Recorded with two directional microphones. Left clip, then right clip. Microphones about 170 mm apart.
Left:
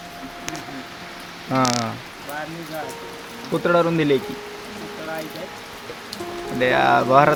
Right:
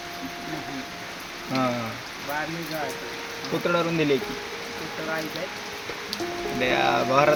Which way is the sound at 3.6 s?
50° left (ahead or behind).